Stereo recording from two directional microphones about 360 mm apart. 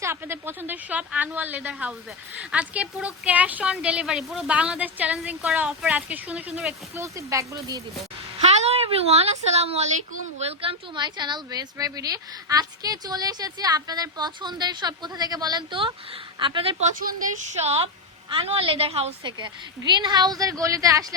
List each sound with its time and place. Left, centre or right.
0.0 s a woman's voice: centre